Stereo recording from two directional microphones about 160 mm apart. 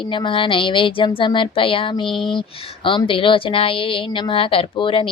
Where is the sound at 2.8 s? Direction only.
30° left (ahead or behind).